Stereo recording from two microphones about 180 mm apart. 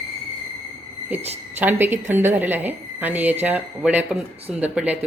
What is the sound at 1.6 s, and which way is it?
Speech, 10° right (ahead or behind).